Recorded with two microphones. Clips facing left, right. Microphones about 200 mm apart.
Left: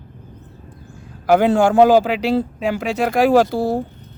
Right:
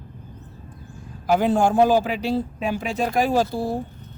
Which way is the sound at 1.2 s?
75° left (ahead or behind).